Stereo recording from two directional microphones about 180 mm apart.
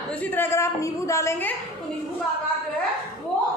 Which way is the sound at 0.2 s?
10° left (ahead or behind).